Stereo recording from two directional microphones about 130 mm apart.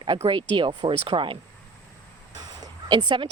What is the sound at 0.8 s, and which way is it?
Speech, 40° right (ahead or behind).